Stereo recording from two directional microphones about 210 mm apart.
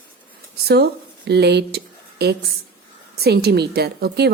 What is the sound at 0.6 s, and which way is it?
A woman's voice, 50° right (ahead or behind).